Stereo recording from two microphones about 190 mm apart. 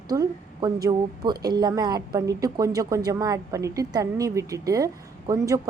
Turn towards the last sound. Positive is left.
turn(degrees=-15)  # may be behind; listen again after turning